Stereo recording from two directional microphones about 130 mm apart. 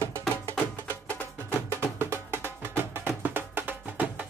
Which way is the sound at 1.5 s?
20° right (ahead or behind).